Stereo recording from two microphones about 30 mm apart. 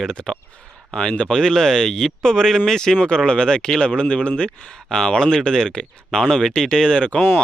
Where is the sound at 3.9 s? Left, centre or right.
Left.